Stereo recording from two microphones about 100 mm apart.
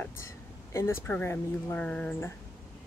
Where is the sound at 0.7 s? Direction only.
25° left (ahead or behind).